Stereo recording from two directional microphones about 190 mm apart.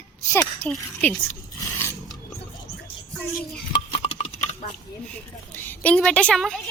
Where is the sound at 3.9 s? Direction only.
30° left (ahead or behind).